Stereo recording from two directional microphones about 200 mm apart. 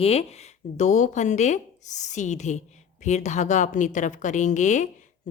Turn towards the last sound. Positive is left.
turn(degrees=35)  # may be behind; listen again after turning